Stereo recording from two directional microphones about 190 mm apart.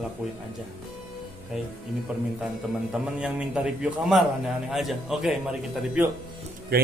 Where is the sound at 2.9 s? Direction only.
5° right (ahead or behind).